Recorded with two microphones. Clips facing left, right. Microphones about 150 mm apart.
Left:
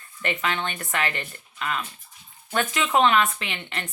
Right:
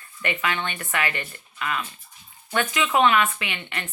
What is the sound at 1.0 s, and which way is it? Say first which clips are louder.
Speech: even; 5° right (ahead or behind).